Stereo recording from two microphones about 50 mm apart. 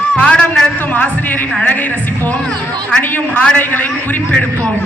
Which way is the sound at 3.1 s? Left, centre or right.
Left.